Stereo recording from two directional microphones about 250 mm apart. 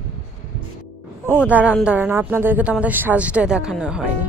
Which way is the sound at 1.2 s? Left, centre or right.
Centre.